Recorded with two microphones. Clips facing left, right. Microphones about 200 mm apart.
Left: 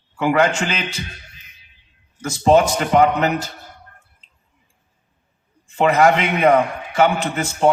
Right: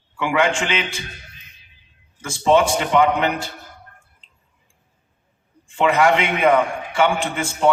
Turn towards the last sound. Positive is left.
turn(degrees=40)  # may be behind; listen again after turning